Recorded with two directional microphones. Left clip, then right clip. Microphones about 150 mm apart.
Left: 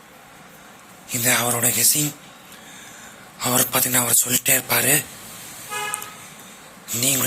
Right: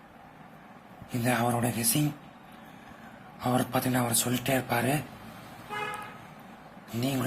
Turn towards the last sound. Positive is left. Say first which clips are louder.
# left 9 dB
turn(degrees=5)  # may be behind; listen again after turning